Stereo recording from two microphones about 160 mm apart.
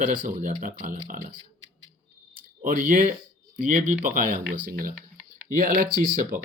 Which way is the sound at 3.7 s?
55° right (ahead or behind).